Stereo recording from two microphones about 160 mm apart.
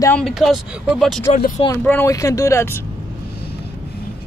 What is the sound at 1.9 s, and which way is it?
Speech, 15° left (ahead or behind).